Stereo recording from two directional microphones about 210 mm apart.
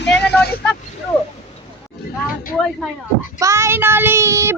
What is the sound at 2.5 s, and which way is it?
Speech, 5° left (ahead or behind).